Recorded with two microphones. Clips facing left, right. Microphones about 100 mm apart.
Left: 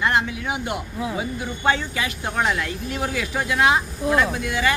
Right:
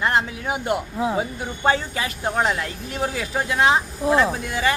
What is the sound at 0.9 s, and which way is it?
Speech, 30° right (ahead or behind).